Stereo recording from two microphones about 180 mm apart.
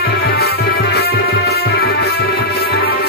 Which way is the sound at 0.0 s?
55° left (ahead or behind).